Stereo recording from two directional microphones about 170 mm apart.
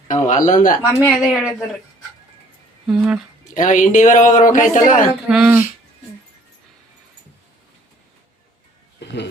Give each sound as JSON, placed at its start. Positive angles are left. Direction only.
{"t": 0.1, "sound": "speech", "side_deg": 45}
{"t": 0.9, "sound": "speech", "side_deg": -5}
{"t": 2.8, "sound": "speech", "side_deg": -5}
{"t": 3.5, "sound": "speech", "side_deg": 45}
{"t": 5.3, "sound": "speech", "side_deg": -5}